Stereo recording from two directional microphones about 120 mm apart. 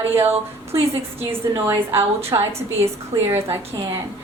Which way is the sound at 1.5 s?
25° right (ahead or behind).